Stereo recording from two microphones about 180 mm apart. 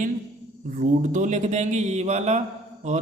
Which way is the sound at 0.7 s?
45° right (ahead or behind).